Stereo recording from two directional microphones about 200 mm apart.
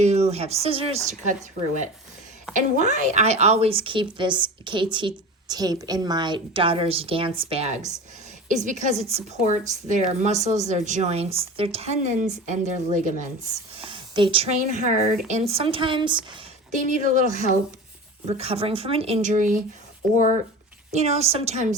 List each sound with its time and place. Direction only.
0.0 s a woman's voice: 35° right (ahead or behind)
2.6 s a woman's voice: 35° right (ahead or behind)
13.7 s a woman's voice: 25° right (ahead or behind)
17.0 s a woman's voice: 40° right (ahead or behind)